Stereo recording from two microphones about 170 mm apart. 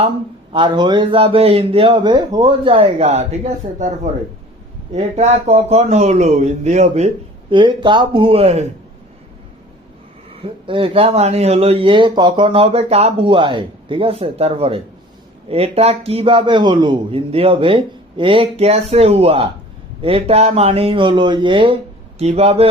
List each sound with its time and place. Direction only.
0.5 s speech: 25° right (ahead or behind)
7.5 s speech: 30° right (ahead or behind)
10.4 s speech: 30° right (ahead or behind)